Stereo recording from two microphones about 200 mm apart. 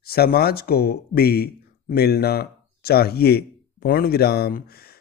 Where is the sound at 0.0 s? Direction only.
50° left (ahead or behind).